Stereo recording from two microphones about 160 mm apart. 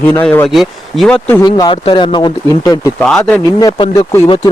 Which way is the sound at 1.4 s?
25° left (ahead or behind).